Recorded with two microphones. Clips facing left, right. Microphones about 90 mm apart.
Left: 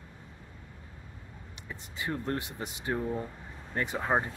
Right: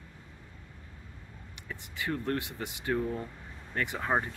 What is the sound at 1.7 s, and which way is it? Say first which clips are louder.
Speech: right 1 dB; 25° left (ahead or behind).